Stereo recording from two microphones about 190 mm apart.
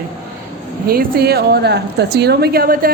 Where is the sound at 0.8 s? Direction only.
55° right (ahead or behind).